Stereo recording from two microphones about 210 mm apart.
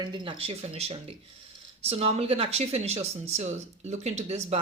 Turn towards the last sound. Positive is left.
turn(degrees=-30)  # may be behind; listen again after turning